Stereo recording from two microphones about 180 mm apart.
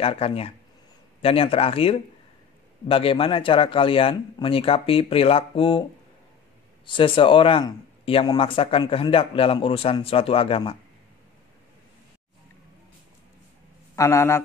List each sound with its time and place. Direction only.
0.0 s speech: 30° left (ahead or behind)
6.9 s speech: 30° left (ahead or behind)
13.9 s a man's voice: 15° left (ahead or behind)